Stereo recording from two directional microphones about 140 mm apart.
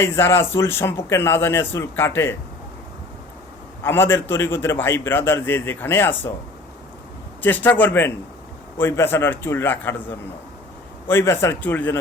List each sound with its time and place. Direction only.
0.0 s a man's voice: 20° left (ahead or behind)
3.8 s a man's voice: 15° left (ahead or behind)
7.4 s a man's voice: 15° left (ahead or behind)
11.1 s a man's voice: 20° left (ahead or behind)